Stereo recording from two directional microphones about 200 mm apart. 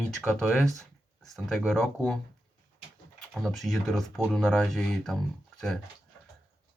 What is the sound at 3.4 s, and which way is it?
Speech, centre (ahead or behind).